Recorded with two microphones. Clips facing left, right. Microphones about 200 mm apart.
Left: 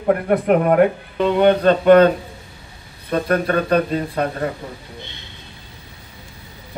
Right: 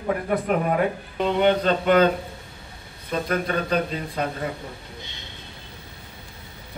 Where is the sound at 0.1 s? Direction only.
60° left (ahead or behind).